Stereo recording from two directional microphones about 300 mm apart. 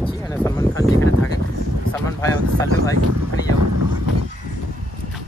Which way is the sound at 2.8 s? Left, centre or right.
Centre.